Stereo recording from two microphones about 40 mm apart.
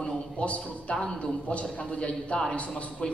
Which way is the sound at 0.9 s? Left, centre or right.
Centre.